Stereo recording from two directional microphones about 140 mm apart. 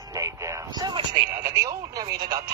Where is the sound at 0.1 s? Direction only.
25° right (ahead or behind).